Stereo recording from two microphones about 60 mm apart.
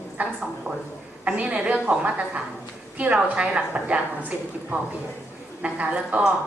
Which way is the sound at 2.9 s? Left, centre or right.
Right.